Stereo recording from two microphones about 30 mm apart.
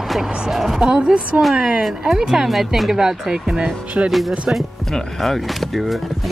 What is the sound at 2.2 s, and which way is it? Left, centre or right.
Speech, centre.